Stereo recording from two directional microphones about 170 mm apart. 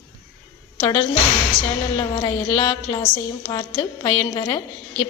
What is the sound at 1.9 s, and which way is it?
A woman's voice, 30° left (ahead or behind).